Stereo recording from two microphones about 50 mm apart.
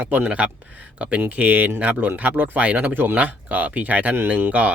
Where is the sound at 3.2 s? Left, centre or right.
Right.